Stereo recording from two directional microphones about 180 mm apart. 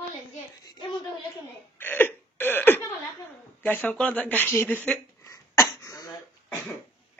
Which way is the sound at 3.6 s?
10° left (ahead or behind).